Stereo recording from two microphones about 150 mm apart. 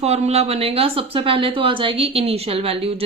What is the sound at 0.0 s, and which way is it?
Speech, 45° right (ahead or behind).